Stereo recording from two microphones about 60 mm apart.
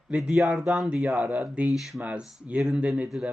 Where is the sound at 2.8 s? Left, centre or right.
Centre.